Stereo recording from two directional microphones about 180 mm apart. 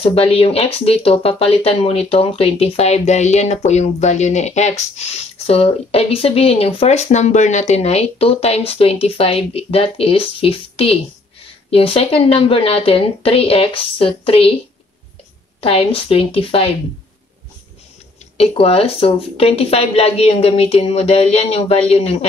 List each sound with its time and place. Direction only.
0.0 s speech: 35° left (ahead or behind)
15.6 s speech: 30° left (ahead or behind)
18.4 s speech: 35° left (ahead or behind)